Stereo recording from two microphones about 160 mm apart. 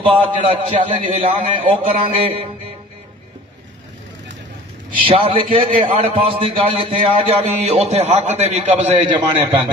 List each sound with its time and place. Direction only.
0.1 s a man's voice: 35° right (ahead or behind)
5.0 s a man's voice: 35° right (ahead or behind)